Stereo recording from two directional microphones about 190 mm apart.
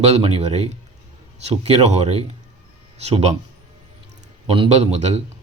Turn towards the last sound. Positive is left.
turn(degrees=-35)  # may be behind; listen again after turning